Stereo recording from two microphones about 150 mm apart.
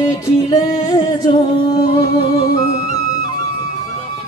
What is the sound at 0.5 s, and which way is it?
Singing, 25° left (ahead or behind).